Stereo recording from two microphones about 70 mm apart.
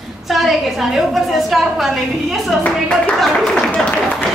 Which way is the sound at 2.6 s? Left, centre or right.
Centre.